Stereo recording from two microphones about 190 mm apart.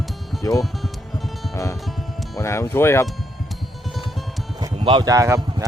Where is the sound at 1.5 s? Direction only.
15° left (ahead or behind).